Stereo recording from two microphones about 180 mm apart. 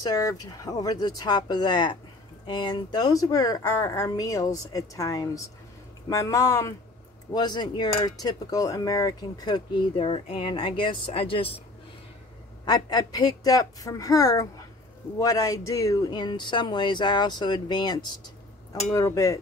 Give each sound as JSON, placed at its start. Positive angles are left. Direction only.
{"t": 0.0, "sound": "a woman's voice", "side_deg": 20}
{"t": 9.9, "sound": "a woman's voice", "side_deg": 30}
{"t": 12.6, "sound": "a woman's voice", "side_deg": 20}